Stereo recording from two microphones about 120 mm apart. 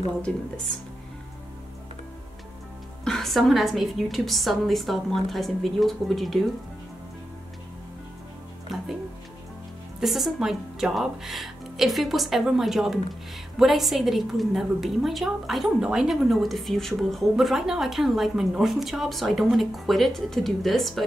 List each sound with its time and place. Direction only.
0.3 s a woman's voice: 5° left (ahead or behind)
3.1 s a woman's voice: centre (ahead or behind)
8.7 s music: centre (ahead or behind)
9.9 s a woman's voice: centre (ahead or behind)